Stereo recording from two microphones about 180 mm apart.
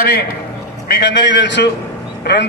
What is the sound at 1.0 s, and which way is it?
Speech, 75° left (ahead or behind).